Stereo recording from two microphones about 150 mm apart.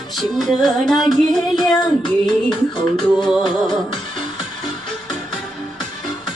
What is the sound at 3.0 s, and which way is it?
Music, 30° left (ahead or behind).